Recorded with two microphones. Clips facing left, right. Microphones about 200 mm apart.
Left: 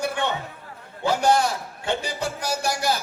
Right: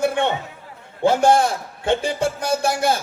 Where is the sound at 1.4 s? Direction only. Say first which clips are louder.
Right 4 dB; 50° right (ahead or behind).